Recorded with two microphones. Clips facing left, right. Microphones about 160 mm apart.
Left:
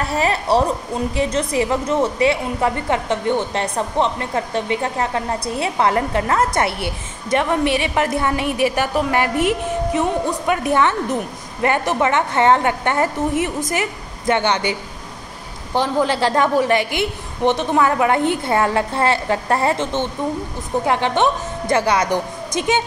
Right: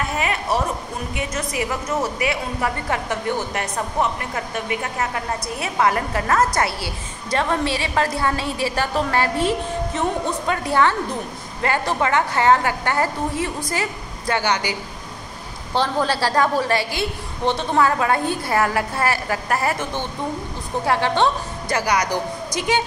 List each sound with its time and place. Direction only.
0.0 s a woman's voice: 35° left (ahead or behind)